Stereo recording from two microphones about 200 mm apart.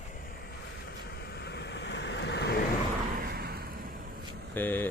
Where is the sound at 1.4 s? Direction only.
55° left (ahead or behind).